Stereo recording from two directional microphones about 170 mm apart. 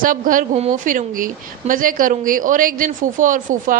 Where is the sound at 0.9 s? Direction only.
55° right (ahead or behind).